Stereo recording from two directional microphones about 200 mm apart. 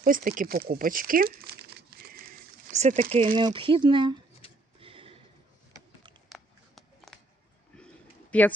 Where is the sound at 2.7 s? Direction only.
35° right (ahead or behind).